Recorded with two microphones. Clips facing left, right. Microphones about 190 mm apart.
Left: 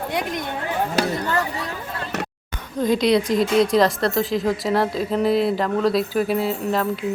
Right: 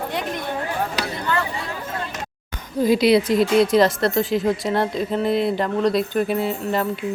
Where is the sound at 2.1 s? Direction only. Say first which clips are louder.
Left 5 dB; 65° left (ahead or behind).